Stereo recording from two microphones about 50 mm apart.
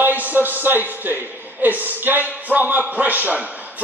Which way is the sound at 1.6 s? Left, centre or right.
Right.